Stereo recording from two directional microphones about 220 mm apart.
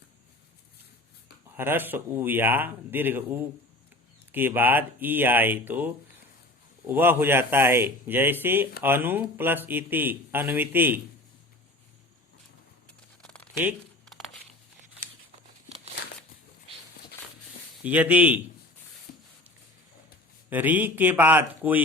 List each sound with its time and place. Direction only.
1.5 s speech: 10° right (ahead or behind)
13.2 s a sound: 5° left (ahead or behind)
17.8 s speech: 5° right (ahead or behind)
20.5 s speech: 10° right (ahead or behind)